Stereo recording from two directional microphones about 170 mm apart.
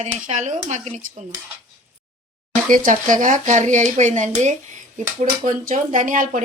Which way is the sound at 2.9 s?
50° right (ahead or behind).